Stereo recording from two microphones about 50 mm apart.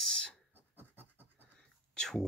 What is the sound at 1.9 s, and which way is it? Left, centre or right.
Speech, centre.